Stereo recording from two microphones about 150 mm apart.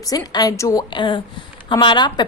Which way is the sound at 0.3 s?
25° left (ahead or behind).